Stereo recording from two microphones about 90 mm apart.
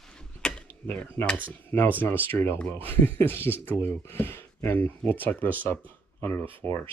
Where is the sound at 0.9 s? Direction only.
25° left (ahead or behind).